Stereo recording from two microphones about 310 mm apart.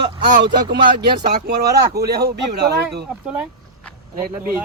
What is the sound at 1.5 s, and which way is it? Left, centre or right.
Speech, right.